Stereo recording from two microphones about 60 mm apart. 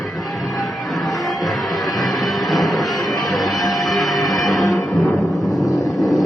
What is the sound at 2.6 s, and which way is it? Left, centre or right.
Vehicle, centre.